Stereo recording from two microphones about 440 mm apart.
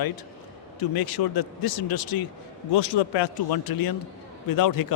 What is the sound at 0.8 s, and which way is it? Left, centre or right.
A man's voice, left.